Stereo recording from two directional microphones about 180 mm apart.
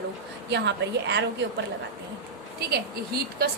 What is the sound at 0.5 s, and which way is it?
Speech, 70° right (ahead or behind).